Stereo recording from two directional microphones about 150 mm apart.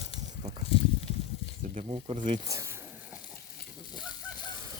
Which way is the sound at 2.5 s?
20° right (ahead or behind).